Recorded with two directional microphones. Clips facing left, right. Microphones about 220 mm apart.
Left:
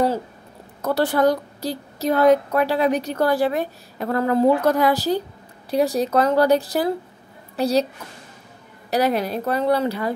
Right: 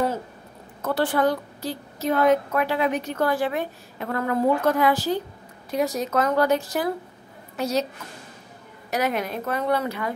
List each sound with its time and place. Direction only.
0.8 s a woman's voice: 40° left (ahead or behind)
8.9 s a woman's voice: 35° left (ahead or behind)